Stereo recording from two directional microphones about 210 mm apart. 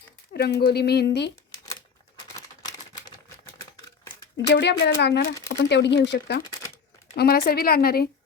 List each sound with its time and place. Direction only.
0.3 s speech: 50° left (ahead or behind)
4.4 s speech: 50° left (ahead or behind)